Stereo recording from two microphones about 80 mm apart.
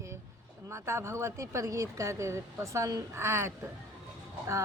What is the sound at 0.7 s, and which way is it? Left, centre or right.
Speech, right.